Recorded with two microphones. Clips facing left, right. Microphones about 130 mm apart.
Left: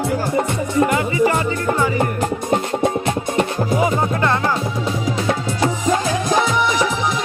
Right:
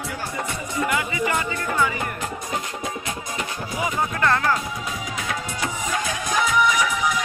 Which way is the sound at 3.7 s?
30° left (ahead or behind).